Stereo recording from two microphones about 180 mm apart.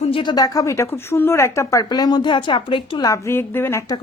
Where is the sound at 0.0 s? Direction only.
30° left (ahead or behind).